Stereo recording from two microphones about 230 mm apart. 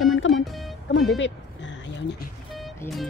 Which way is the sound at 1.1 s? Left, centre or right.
Left.